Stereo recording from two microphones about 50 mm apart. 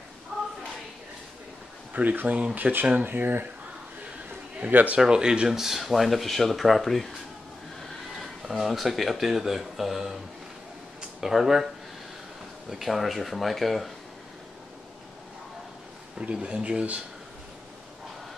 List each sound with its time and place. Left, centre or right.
0.3 s a sound: centre
2.0 s speech: right
4.6 s speech: right
4.9 s speech: centre
8.2 s speech: centre
11.1 s speech: centre
16.2 s speech: centre